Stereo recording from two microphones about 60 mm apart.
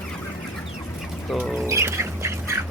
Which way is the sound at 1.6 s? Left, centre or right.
Right.